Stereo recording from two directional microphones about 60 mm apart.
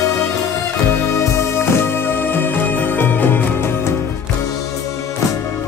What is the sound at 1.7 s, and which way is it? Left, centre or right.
Music, left.